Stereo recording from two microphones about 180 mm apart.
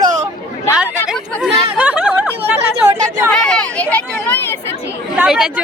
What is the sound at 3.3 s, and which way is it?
Speech, 5° left (ahead or behind).